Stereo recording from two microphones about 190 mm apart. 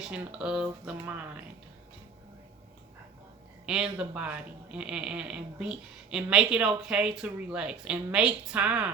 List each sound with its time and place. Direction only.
0.0 s speech: 5° right (ahead or behind)
3.9 s speech: 5° right (ahead or behind)